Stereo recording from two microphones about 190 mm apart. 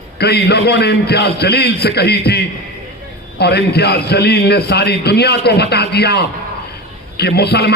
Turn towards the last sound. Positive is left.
turn(degrees=60)  # may be behind; listen again after turning